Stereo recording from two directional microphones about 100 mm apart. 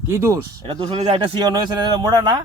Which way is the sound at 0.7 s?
65° right (ahead or behind).